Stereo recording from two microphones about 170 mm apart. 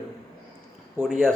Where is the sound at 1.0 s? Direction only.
15° right (ahead or behind).